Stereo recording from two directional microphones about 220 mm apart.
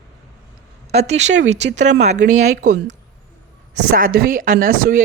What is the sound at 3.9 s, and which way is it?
Speech, 40° right (ahead or behind).